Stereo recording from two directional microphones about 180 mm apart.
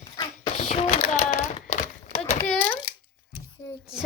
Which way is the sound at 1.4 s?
40° left (ahead or behind).